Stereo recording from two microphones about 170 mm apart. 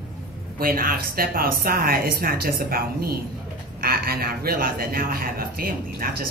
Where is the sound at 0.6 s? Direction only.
60° right (ahead or behind).